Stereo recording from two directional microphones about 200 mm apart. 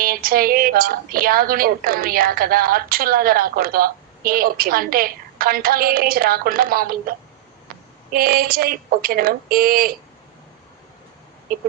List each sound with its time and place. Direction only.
0.0 s a woman's voice: 45° right (ahead or behind)
8.1 s a woman's voice: 45° right (ahead or behind)